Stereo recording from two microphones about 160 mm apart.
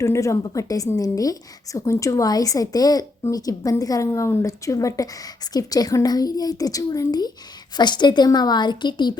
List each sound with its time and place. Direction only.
0.0 s a woman's voice: 20° left (ahead or behind)